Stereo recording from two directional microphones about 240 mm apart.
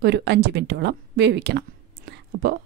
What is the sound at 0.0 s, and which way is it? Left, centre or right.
Speech, right.